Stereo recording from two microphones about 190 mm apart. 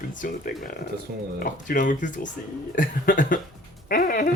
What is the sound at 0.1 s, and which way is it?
Speech, 45° left (ahead or behind).